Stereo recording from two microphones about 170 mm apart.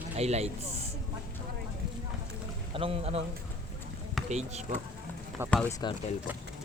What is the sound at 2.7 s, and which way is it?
Speech, 35° right (ahead or behind).